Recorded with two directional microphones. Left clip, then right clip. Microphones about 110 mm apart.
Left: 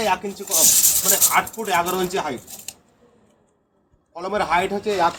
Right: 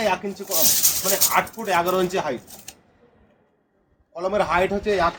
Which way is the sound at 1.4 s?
30° right (ahead or behind).